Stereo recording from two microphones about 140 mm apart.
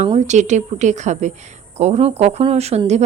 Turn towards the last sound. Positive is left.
turn(degrees=-50)  # may be behind; listen again after turning